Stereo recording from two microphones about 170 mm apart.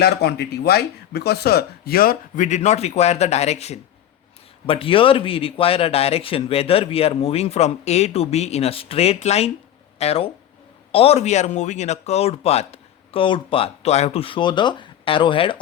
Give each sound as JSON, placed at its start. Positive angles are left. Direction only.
{"t": 0.0, "sound": "a man's voice", "side_deg": 70}